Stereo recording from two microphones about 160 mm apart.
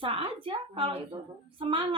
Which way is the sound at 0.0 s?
35° right (ahead or behind).